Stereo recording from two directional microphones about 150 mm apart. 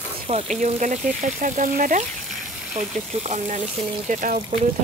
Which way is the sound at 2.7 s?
50° right (ahead or behind).